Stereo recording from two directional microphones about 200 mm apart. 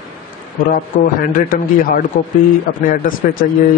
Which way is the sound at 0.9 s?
45° left (ahead or behind).